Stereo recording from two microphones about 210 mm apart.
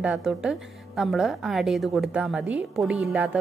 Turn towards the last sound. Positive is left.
turn(degrees=-10)  # may be behind; listen again after turning